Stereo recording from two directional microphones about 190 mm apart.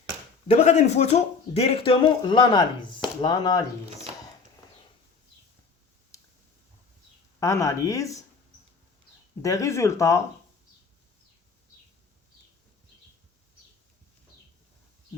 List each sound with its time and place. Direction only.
0.4 s speech: 35° left (ahead or behind)
7.3 s speech: 15° left (ahead or behind)
9.4 s speech: 15° left (ahead or behind)